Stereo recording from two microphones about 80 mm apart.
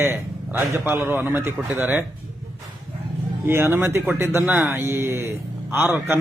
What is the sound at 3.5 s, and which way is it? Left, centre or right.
Speech, right.